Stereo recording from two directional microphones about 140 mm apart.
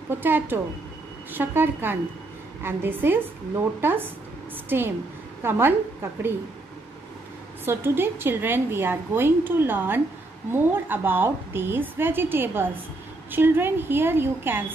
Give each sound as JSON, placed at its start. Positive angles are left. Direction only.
{"t": 0.1, "sound": "a woman's voice", "side_deg": -15}
{"t": 7.6, "sound": "a woman's voice", "side_deg": -15}